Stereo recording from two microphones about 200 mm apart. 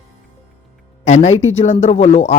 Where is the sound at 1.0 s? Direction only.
35° left (ahead or behind).